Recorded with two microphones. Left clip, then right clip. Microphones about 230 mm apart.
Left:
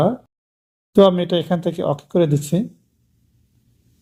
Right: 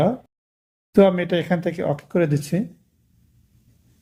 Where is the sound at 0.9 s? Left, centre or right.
Left.